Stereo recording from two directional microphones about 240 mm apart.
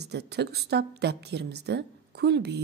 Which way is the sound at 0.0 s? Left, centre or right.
Right.